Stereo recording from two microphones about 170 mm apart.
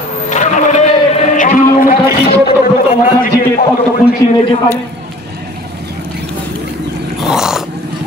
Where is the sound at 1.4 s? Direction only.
50° left (ahead or behind).